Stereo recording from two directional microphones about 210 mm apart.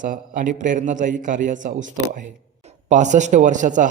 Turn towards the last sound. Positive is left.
turn(degrees=-35)  # may be behind; listen again after turning